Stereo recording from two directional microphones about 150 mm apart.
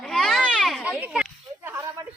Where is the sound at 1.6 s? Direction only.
15° right (ahead or behind).